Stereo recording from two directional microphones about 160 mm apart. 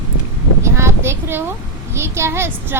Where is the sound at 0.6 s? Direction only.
15° right (ahead or behind).